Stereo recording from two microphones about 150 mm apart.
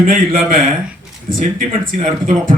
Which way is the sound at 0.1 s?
65° right (ahead or behind).